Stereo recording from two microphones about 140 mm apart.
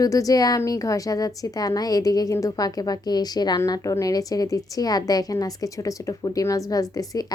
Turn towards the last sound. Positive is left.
turn(degrees=25)  # may be behind; listen again after turning